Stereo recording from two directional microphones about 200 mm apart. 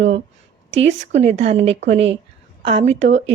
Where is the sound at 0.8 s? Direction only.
35° right (ahead or behind).